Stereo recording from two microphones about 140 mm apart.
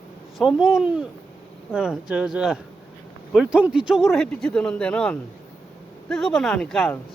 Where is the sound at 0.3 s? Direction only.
5° right (ahead or behind).